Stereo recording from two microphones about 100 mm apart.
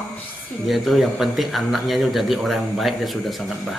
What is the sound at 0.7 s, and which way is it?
Speech, centre (ahead or behind).